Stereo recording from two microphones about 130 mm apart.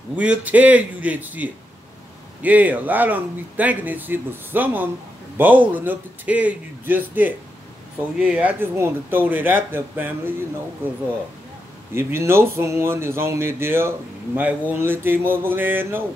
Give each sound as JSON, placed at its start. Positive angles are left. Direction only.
{"t": 0.1, "sound": "speech", "side_deg": -10}
{"t": 11.9, "sound": "speech", "side_deg": -20}